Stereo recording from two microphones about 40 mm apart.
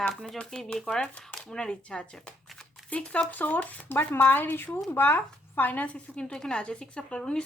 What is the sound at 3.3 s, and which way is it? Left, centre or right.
Speech, left.